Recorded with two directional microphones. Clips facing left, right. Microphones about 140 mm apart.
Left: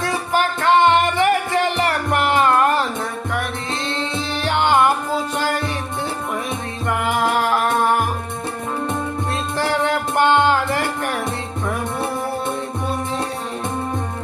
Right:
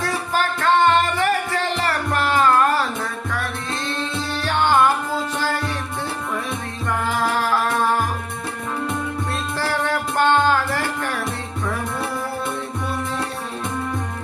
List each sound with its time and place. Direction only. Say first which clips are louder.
0.3 s music: left 2 dB; 15° left (ahead or behind)
6.8 s music: left 2 dB; 15° left (ahead or behind)
9.3 s music: left 4 dB; 20° left (ahead or behind)